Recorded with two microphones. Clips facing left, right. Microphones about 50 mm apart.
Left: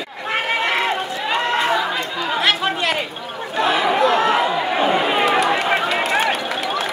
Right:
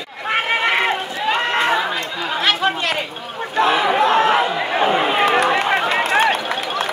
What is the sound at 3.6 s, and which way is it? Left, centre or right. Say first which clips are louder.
Chatter: right 1 dB; right.